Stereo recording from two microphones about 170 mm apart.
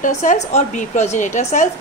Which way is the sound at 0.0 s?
50° left (ahead or behind).